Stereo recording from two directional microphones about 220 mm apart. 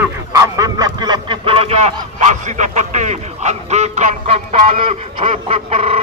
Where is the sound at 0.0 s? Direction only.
15° right (ahead or behind).